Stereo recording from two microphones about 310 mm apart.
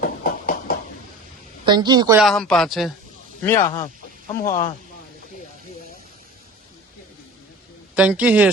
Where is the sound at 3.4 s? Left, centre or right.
Centre.